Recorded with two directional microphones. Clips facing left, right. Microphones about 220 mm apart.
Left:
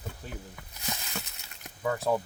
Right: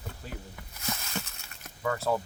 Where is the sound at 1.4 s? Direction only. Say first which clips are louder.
Left 2 dB; 20° left (ahead or behind).